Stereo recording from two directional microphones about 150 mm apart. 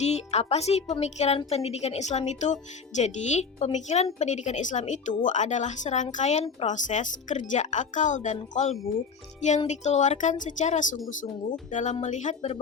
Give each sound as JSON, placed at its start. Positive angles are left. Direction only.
{"t": 0.0, "sound": "a woman's voice", "side_deg": 45}
{"t": 9.6, "sound": "a woman's voice", "side_deg": 50}